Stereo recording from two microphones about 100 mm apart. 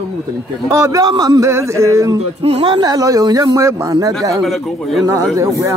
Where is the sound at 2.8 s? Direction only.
40° right (ahead or behind).